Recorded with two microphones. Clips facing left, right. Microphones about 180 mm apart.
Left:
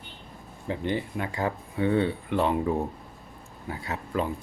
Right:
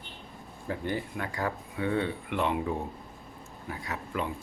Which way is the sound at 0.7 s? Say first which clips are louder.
Left 4 dB; 20° left (ahead or behind).